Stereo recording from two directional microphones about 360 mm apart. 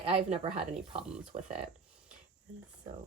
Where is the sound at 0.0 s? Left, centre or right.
Centre.